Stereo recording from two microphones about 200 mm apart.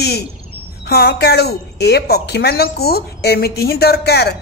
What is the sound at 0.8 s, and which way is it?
A woman's voice, 50° left (ahead or behind).